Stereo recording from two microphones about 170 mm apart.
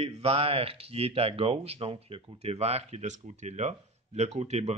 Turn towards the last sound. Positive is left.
turn(degrees=-40)  # may be behind; listen again after turning